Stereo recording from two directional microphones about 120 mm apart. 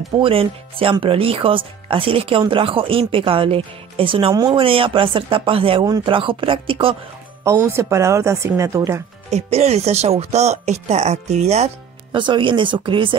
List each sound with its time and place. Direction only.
0.2 s speech: 50° right (ahead or behind)
7.4 s speech: 20° right (ahead or behind)
9.3 s speech: 60° right (ahead or behind)
12.1 s speech: 40° right (ahead or behind)